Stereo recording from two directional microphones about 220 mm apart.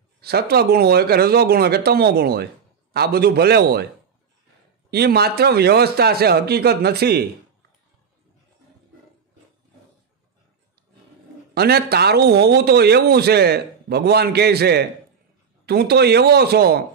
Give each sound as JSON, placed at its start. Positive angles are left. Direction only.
{"t": 0.2, "sound": "a man's voice", "side_deg": -45}
{"t": 4.9, "sound": "a man's voice", "side_deg": -45}
{"t": 11.5, "sound": "a man's voice", "side_deg": -45}